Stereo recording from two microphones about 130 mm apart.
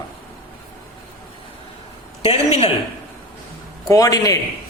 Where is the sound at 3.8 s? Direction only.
30° left (ahead or behind).